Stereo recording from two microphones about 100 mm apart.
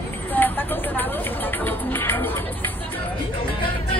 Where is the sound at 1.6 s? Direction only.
20° left (ahead or behind).